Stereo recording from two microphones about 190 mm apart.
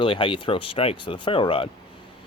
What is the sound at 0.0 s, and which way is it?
Speech, 25° left (ahead or behind).